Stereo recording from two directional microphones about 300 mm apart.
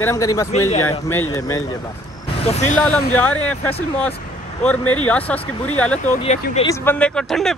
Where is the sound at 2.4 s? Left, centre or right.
Left.